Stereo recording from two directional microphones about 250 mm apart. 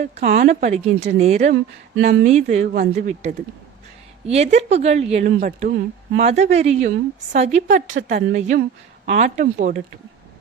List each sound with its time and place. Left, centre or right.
0.0 s speech: right